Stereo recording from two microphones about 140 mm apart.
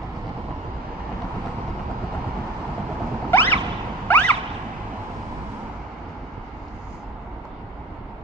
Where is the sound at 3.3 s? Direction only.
15° left (ahead or behind).